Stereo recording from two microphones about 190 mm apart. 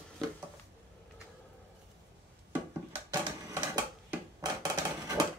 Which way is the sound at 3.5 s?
20° right (ahead or behind).